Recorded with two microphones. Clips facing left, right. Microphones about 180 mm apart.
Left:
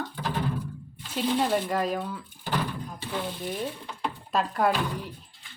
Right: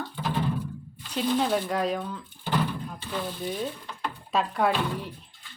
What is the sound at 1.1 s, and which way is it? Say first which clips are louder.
Speech: even; 5° left (ahead or behind).